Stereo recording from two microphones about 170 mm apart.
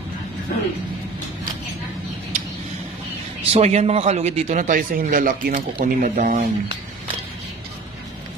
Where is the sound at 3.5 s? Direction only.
40° right (ahead or behind).